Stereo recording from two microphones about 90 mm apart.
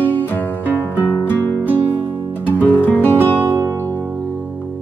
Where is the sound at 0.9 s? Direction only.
25° left (ahead or behind).